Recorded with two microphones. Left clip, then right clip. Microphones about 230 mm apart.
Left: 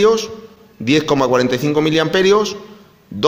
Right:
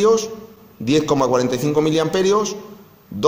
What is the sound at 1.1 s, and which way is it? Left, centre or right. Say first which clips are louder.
Speech: left 2 dB; left.